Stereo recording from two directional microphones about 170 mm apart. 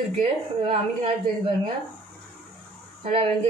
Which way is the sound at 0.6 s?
30° right (ahead or behind).